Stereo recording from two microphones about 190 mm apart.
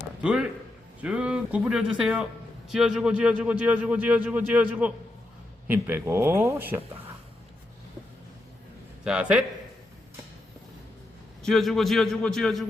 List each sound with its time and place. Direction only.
0.2 s a man's voice: 5° right (ahead or behind)
9.0 s a man's voice: 5° right (ahead or behind)
11.4 s a man's voice: centre (ahead or behind)